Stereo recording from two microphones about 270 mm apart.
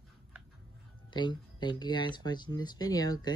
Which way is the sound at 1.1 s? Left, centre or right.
Centre.